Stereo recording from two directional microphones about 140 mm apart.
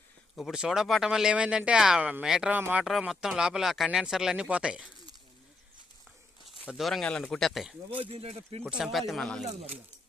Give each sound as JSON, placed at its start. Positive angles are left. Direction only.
{"t": 0.3, "sound": "speech", "side_deg": 0}
{"t": 6.7, "sound": "speech", "side_deg": 0}
{"t": 7.9, "sound": "speech", "side_deg": -45}
{"t": 8.6, "sound": "speech", "side_deg": 0}